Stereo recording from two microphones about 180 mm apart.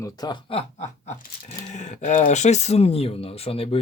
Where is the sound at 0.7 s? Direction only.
40° left (ahead or behind).